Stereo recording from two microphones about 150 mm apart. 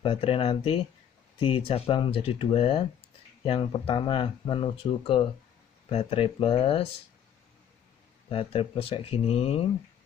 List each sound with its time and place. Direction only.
0.0 s speech: 40° left (ahead or behind)
8.3 s speech: 40° left (ahead or behind)